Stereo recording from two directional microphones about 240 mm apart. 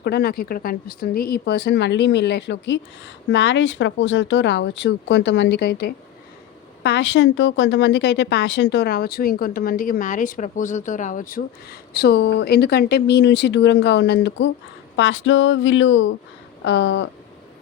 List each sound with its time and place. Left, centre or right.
0.0 s speech: left